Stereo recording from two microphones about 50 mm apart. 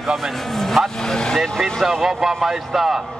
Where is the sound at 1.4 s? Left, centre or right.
Centre.